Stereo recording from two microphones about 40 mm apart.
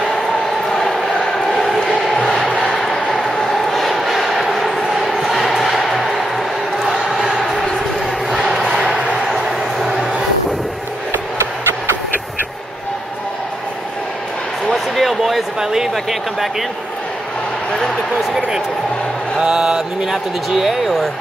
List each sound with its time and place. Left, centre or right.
0.7 s a sound: centre
1.2 s crowd: centre
2.6 s vehicle: centre
3.4 s crowd: centre
8.3 s a sound: centre
14.7 s a sound: centre
15.6 s speech: centre
19.3 s mantra: centre
20.4 s speech: centre